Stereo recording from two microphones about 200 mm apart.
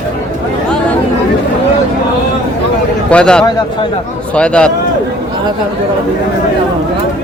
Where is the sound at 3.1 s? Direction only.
5° left (ahead or behind).